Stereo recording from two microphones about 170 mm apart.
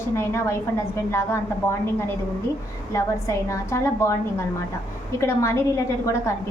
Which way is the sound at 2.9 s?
20° left (ahead or behind).